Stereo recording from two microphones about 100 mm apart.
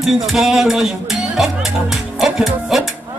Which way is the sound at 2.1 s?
5° right (ahead or behind).